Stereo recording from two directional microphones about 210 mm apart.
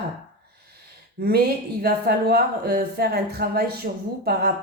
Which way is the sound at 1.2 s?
45° right (ahead or behind).